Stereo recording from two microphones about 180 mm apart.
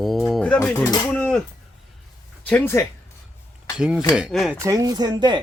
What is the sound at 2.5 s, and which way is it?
Speech, 10° left (ahead or behind).